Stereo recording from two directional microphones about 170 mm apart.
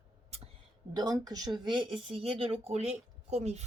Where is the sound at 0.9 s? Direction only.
20° right (ahead or behind); by 3.6 s 40° right (ahead or behind).